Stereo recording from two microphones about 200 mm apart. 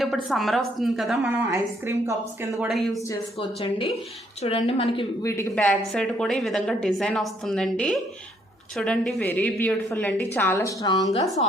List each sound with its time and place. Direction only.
0.0 s a woman's voice: centre (ahead or behind)
1.5 s a woman's voice: 15° right (ahead or behind)
2.6 s a woman's voice: centre (ahead or behind)
3.3 s a woman's voice: 30° left (ahead or behind)
5.2 s a woman's voice: 10° left (ahead or behind)